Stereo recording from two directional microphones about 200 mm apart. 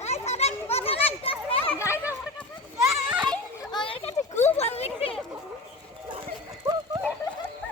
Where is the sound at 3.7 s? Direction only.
25° left (ahead or behind).